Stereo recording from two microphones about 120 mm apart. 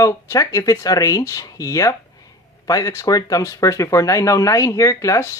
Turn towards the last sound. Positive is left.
turn(degrees=25)  # may be behind; listen again after turning